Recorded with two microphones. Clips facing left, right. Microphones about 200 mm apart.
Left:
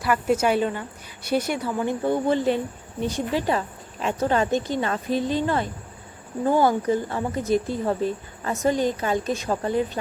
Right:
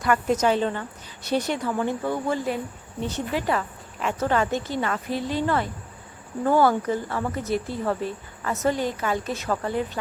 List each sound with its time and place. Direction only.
0.0 s a woman's voice: 5° left (ahead or behind); by 2.6 s 25° left (ahead or behind)
3.0 s a woman's voice: 15° left (ahead or behind)